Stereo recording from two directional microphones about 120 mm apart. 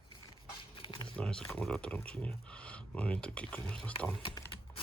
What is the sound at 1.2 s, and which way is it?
Speech, 10° left (ahead or behind).